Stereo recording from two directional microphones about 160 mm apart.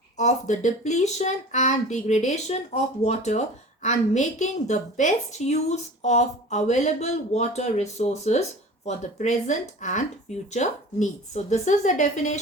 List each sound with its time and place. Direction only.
0.2 s a woman's voice: 50° left (ahead or behind)